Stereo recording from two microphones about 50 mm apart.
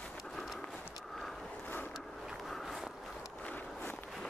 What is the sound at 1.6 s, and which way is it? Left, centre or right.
Vehicle, left.